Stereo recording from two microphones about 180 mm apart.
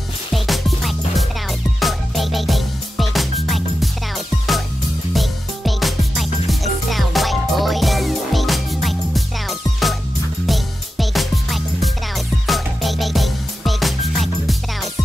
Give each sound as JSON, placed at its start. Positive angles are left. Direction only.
{"t": 0.3, "sound": "music", "side_deg": 0}
{"t": 5.1, "sound": "music", "side_deg": 0}